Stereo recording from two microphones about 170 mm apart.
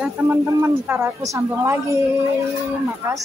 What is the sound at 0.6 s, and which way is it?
Speech, 15° right (ahead or behind).